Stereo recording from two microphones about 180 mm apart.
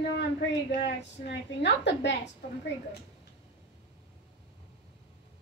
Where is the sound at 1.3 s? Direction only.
75° left (ahead or behind).